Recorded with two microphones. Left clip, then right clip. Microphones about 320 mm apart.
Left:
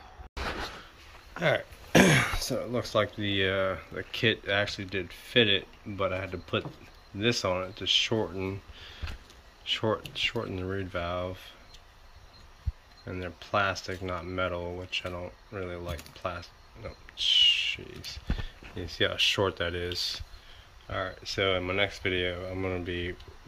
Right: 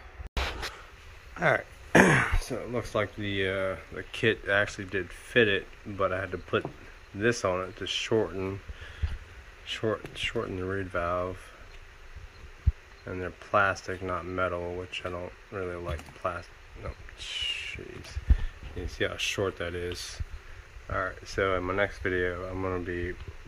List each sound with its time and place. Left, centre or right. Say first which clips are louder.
1.4 s speech: right 2 dB; centre
9.7 s speech: left 2 dB; centre
13.0 s speech: right 2 dB; centre
18.9 s speech: left 4 dB; centre
20.8 s speech: right 2 dB; centre